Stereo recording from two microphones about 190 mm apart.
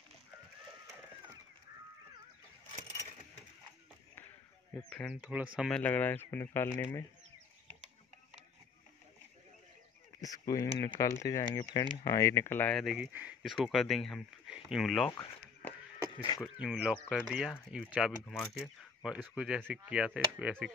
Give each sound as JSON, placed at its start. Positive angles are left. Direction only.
{"t": 4.7, "sound": "speech", "side_deg": 5}
{"t": 5.2, "sound": "speech", "side_deg": -5}
{"t": 5.7, "sound": "speech", "side_deg": 5}
{"t": 10.2, "sound": "speech", "side_deg": 20}
{"t": 16.2, "sound": "speech", "side_deg": 20}
{"t": 16.5, "sound": "speech", "side_deg": -5}